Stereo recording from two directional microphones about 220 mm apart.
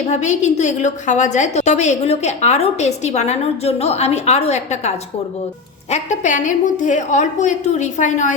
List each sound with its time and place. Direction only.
0.1 s a woman's voice: 30° left (ahead or behind)